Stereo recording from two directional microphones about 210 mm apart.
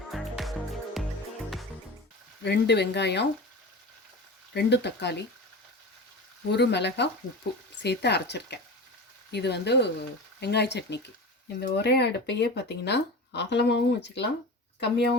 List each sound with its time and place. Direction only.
0.1 s music: centre (ahead or behind)
2.4 s speech: 55° left (ahead or behind)
4.5 s speech: 55° left (ahead or behind)
6.5 s speech: 55° left (ahead or behind)